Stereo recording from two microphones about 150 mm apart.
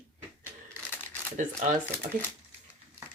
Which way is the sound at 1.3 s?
55° right (ahead or behind).